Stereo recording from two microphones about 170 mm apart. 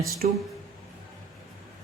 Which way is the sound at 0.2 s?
50° right (ahead or behind).